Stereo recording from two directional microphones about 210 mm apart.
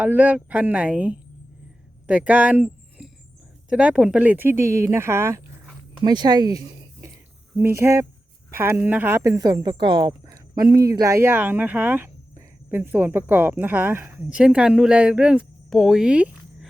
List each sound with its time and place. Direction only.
0.0 s speech: 10° right (ahead or behind)